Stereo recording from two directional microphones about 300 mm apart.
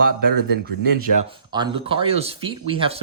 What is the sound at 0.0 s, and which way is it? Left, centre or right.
Speech, right.